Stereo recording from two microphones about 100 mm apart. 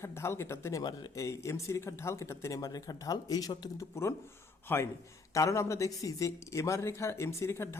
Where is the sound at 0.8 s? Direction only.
45° left (ahead or behind).